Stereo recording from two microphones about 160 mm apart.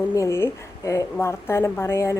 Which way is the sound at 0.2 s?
15° left (ahead or behind).